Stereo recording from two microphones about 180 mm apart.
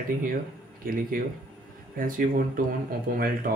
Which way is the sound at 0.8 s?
55° right (ahead or behind).